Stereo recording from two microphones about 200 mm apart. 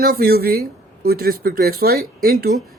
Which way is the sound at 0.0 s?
50° right (ahead or behind).